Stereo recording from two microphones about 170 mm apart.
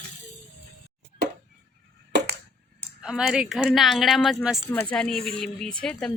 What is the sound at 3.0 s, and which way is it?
A woman's voice, 5° right (ahead or behind).